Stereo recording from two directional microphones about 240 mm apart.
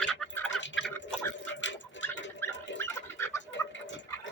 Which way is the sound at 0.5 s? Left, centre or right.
Left.